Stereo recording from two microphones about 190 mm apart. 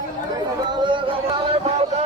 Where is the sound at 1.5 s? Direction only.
35° right (ahead or behind).